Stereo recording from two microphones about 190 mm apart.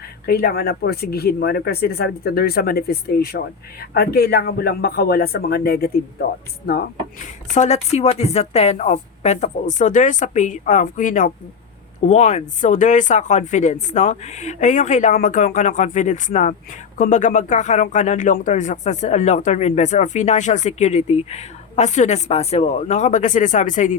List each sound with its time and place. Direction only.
0.3 s speech: 55° left (ahead or behind)
7.5 s speech: 35° left (ahead or behind)